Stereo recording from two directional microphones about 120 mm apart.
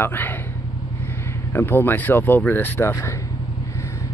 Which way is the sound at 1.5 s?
20° left (ahead or behind).